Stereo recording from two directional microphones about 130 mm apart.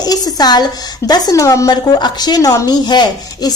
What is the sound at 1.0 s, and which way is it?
A woman's voice, 30° left (ahead or behind).